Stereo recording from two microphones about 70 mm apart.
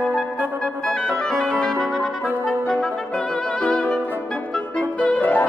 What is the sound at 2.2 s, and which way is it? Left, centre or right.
Trumpet, centre.